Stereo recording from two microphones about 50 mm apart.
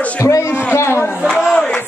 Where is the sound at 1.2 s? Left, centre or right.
Centre.